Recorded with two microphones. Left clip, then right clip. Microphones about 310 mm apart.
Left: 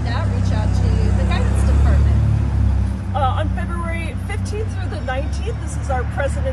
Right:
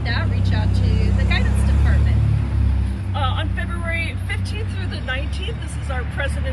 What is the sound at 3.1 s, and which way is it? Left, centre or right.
Speech, centre.